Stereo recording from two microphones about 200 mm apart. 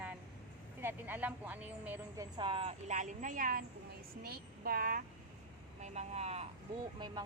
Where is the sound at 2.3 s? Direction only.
25° right (ahead or behind); by 5.1 s 45° right (ahead or behind).